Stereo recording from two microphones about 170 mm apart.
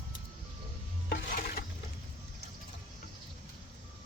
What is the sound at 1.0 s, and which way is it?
Stir, 60° left (ahead or behind).